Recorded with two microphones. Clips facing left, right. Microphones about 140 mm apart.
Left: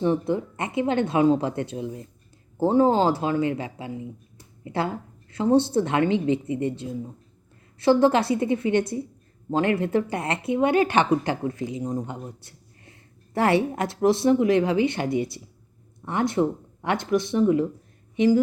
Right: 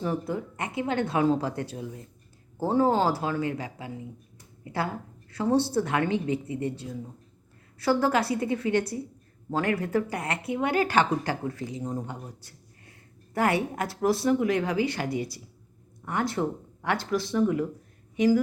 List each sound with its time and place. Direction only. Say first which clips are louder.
0.0 s a woman's voice: left 6 dB; 25° left (ahead or behind)